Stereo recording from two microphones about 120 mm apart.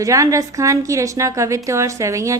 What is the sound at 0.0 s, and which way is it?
A woman's voice, 25° right (ahead or behind).